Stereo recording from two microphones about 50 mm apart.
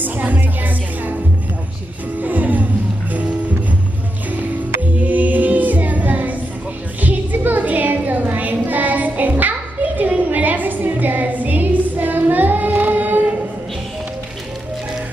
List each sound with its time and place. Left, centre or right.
0.0 s music: right
2.2 s music: right
5.0 s music: right
7.0 s a sound: right